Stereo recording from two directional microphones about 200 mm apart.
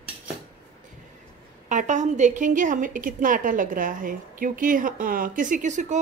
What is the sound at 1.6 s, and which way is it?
A woman's voice, 40° right (ahead or behind).